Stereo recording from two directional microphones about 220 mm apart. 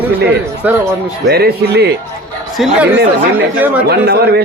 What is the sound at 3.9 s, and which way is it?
Speech, 45° right (ahead or behind).